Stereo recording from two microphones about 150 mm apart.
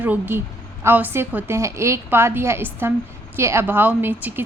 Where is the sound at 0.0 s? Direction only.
15° right (ahead or behind).